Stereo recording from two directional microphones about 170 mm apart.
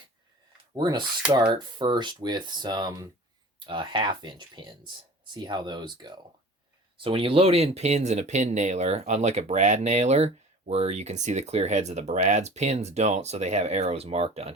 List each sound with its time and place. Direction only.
0.7 s speech: 25° right (ahead or behind)